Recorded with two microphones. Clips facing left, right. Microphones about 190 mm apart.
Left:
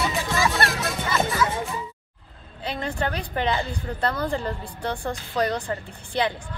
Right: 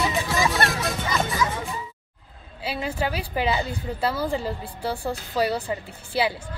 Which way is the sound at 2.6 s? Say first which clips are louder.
Even; 5° right (ahead or behind).